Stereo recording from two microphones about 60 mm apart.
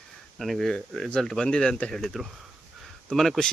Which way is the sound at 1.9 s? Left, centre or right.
Centre.